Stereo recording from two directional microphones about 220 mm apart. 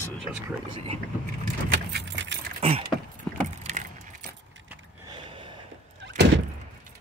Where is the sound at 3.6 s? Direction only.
30° right (ahead or behind).